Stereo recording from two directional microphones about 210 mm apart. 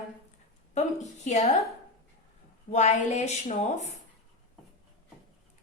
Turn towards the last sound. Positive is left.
turn(degrees=35)  # may be behind; listen again after turning